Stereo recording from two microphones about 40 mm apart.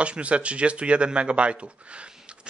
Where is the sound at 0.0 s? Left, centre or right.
Right.